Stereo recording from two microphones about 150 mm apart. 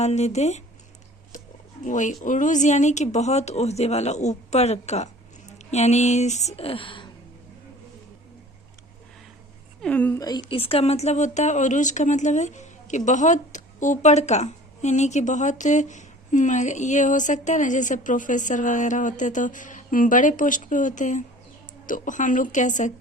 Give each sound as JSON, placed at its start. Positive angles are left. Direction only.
{"t": 0.0, "sound": "speech", "side_deg": 50}
{"t": 1.8, "sound": "a woman's voice", "side_deg": 55}
{"t": 9.8, "sound": "a woman's voice", "side_deg": 10}
{"t": 10.2, "sound": "a woman's voice", "side_deg": 25}
{"t": 10.6, "sound": "a woman's voice", "side_deg": 40}